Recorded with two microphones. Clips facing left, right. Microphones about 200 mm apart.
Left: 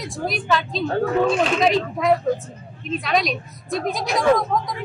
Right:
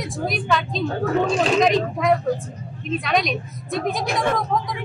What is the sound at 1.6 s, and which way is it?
Speech, centre (ahead or behind).